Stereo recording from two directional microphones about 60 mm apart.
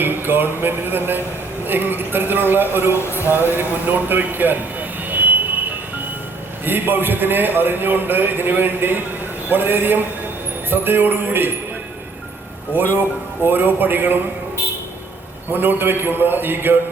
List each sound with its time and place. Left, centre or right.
0.0 s a man's voice: right
4.1 s vehicle: right
6.7 s a man's voice: right
12.7 s a man's voice: right
15.5 s a man's voice: right